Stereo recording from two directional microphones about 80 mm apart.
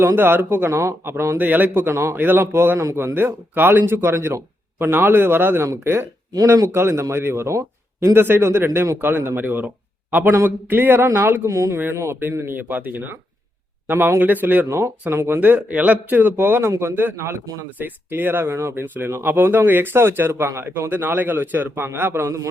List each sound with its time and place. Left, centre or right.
0.2 s a man's voice: right
11.4 s a man's voice: right
15.4 s a man's voice: centre